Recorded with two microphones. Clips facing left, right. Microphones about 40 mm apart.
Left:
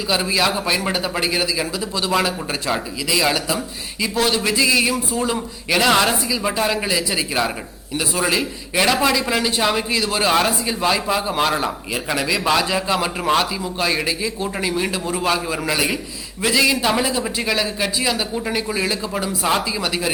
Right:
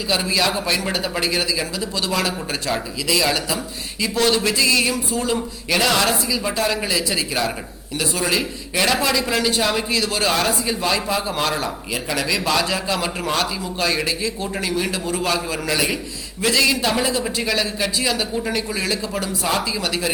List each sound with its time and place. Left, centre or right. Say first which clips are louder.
0.1 s a man's voice: left 1 dB; centre
5.9 s speech: left 4 dB; left
6.3 s a man's voice: left 1 dB; centre